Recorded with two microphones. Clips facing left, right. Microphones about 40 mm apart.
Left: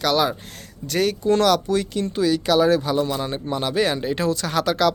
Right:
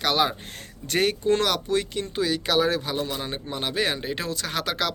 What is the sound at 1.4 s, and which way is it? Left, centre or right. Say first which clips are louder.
Speech: left 5 dB; centre.